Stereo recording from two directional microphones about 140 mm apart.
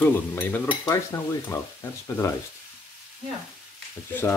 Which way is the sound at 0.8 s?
20° left (ahead or behind).